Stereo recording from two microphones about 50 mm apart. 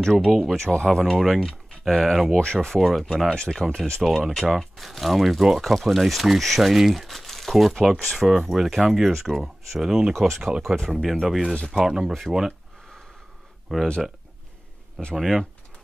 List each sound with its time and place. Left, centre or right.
0.0 s speech: centre
0.3 s speech: centre
0.6 s speech: centre
2.8 s speech: centre
3.3 s speech: centre
4.0 s speech: centre
10.1 s speech: centre
13.7 s speech: centre
15.1 s speech: centre